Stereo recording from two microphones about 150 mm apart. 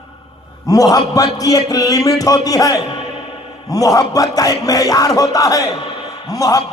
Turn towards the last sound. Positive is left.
turn(degrees=25)  # may be behind; listen again after turning